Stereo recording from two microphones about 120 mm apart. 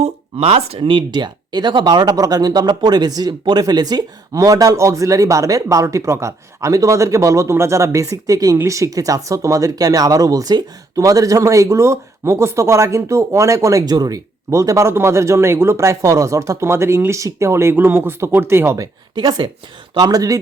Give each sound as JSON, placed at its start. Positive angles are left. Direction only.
{"t": 0.0, "sound": "speech", "side_deg": -55}
{"t": 19.1, "sound": "speech", "side_deg": -35}